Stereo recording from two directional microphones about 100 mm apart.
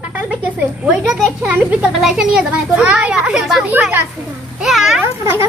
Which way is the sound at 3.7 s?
20° right (ahead or behind).